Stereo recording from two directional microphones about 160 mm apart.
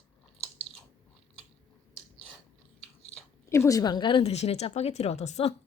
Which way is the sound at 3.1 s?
15° left (ahead or behind).